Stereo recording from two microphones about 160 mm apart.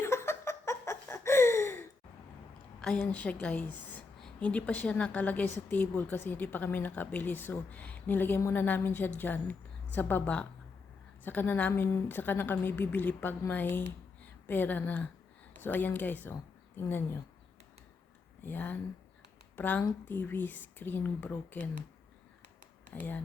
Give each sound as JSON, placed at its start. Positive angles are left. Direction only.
{"t": 0.0, "sound": "laughter", "side_deg": 15}
{"t": 2.8, "sound": "a woman's voice", "side_deg": 5}
{"t": 18.4, "sound": "a woman's voice", "side_deg": 10}
{"t": 22.9, "sound": "speech", "side_deg": 10}